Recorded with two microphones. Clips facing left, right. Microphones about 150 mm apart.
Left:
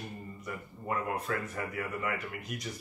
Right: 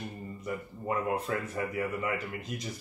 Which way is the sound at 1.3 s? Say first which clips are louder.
Right 2 dB; 25° right (ahead or behind).